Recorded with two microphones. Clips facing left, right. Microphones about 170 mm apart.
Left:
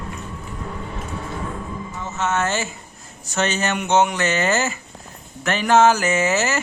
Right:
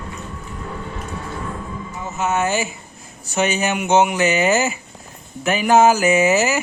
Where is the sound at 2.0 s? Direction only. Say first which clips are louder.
Right 2 dB; 10° right (ahead or behind).